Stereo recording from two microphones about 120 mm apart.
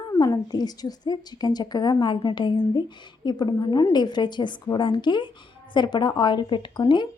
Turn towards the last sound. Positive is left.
turn(degrees=40)  # may be behind; listen again after turning